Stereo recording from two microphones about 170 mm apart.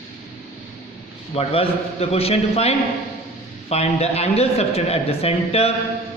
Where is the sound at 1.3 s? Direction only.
35° left (ahead or behind).